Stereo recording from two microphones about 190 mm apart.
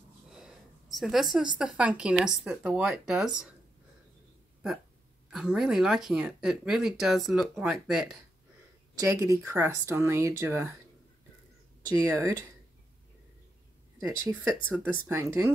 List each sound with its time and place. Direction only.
0.3 s a sound: centre (ahead or behind)
1.6 s speech: 5° right (ahead or behind)
5.3 s speech: 5° right (ahead or behind)
8.9 s speech: 15° right (ahead or behind)
12.0 s speech: 15° right (ahead or behind)
13.9 s speech: 10° right (ahead or behind)